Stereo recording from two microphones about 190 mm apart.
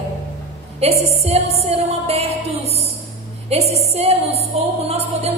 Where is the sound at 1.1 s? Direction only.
35° right (ahead or behind).